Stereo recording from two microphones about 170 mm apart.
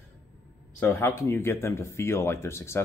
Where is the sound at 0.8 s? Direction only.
15° left (ahead or behind).